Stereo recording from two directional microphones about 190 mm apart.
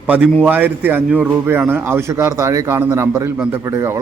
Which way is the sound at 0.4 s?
10° right (ahead or behind).